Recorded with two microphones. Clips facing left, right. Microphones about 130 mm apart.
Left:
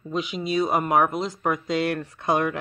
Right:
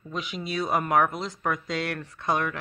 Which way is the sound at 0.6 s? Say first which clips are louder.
Left 1 dB; 10° left (ahead or behind).